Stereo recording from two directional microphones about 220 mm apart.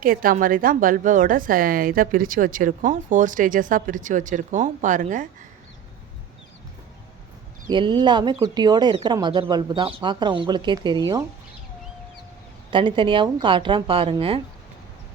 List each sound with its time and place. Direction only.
0.0 s a woman's voice: 40° right (ahead or behind)
7.7 s speech: 20° right (ahead or behind)
12.7 s speech: 20° right (ahead or behind)